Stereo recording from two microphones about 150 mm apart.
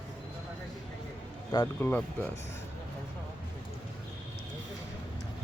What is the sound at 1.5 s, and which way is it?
Speech, 15° left (ahead or behind).